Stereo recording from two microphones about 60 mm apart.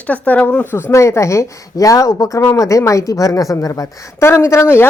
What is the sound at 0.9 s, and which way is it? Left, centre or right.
A woman's voice, left.